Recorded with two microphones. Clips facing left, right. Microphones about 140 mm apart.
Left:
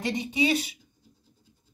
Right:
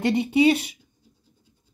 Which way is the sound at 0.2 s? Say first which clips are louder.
Right 7 dB; 65° right (ahead or behind).